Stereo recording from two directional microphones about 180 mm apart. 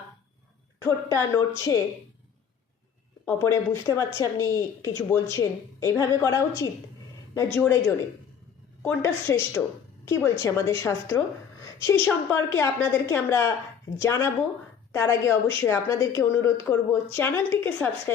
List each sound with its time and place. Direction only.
0.9 s a woman's voice: 15° left (ahead or behind)
3.2 s a woman's voice: 15° left (ahead or behind)